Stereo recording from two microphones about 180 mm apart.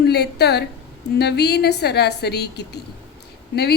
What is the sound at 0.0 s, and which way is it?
A woman's voice, 65° left (ahead or behind).